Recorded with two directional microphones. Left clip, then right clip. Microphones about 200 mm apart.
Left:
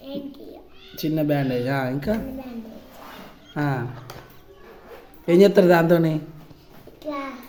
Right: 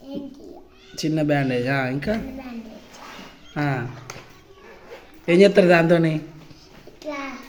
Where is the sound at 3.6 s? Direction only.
Centre (ahead or behind).